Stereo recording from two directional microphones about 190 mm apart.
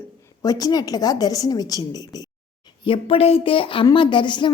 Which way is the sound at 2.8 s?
30° left (ahead or behind).